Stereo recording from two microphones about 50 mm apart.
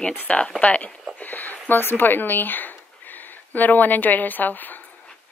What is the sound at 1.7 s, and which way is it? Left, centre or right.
Speech, left.